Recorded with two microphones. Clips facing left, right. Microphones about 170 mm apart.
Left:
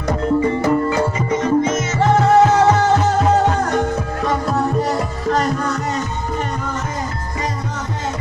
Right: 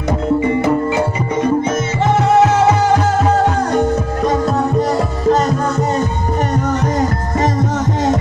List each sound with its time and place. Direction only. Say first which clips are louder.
0.6 s music: right 2 dB; 20° right (ahead or behind)
4.3 s music: right 2 dB; 25° right (ahead or behind)